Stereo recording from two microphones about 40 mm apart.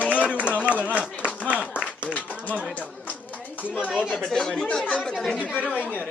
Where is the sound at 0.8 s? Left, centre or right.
Right.